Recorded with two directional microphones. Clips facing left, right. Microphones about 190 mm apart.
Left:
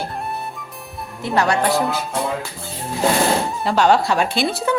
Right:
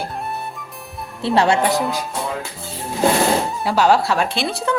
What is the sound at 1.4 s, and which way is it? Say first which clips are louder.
Speech: right 1 dB; 25° right (ahead or behind).